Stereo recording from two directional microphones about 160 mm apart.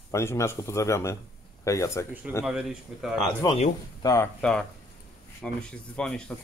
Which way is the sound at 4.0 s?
25° left (ahead or behind).